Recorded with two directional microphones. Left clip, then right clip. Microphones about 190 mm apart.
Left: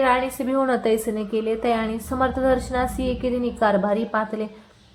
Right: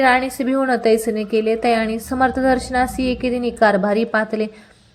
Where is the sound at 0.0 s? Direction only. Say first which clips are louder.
Right 4 dB; 20° right (ahead or behind).